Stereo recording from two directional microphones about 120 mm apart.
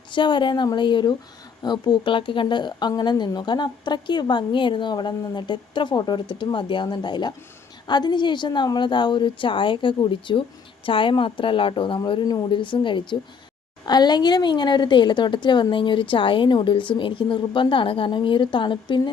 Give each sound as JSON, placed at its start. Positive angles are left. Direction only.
{"t": 0.1, "sound": "speech", "side_deg": 40}